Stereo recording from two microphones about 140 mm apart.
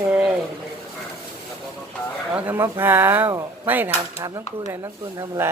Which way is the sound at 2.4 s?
15° right (ahead or behind).